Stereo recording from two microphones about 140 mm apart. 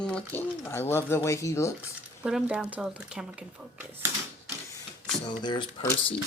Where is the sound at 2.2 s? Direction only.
5° right (ahead or behind).